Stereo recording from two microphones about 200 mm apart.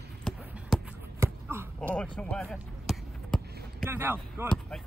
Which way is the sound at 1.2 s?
10° right (ahead or behind).